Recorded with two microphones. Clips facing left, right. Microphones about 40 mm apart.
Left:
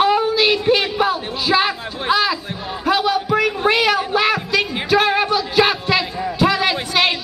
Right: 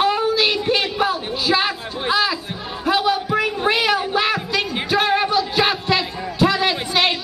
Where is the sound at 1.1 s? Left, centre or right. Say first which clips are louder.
Left 2 dB; centre.